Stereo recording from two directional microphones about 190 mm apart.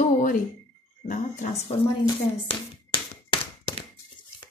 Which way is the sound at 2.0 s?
25° left (ahead or behind).